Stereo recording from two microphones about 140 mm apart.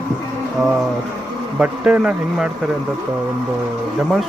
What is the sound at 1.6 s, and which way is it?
Speech, 10° right (ahead or behind).